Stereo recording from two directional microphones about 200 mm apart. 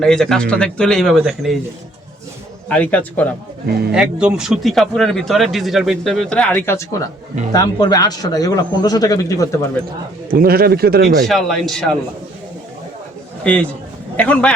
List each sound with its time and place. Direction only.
0.0 s speech: 5° left (ahead or behind)
2.6 s a man's voice: 5° left (ahead or behind)
3.7 s speech: 55° right (ahead or behind)
3.9 s speech: 5° right (ahead or behind); by 9.6 s 15° left (ahead or behind)
10.3 s speech: 50° right (ahead or behind)
11.3 s speech: centre (ahead or behind)
13.4 s a man's voice: 5° left (ahead or behind)